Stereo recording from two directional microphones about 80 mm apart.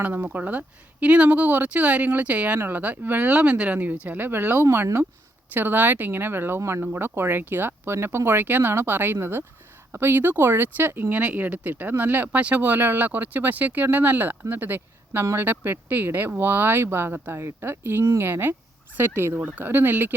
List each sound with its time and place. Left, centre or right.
0.0 s speech: right
4.6 s speech: right
6.6 s speech: right
6.8 s speech: right